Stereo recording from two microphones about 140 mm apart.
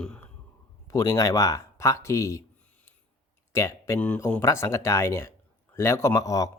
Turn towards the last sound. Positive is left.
turn(degrees=25)  # may be behind; listen again after turning